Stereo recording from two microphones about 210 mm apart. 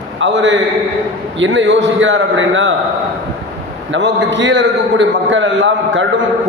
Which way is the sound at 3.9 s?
60° right (ahead or behind).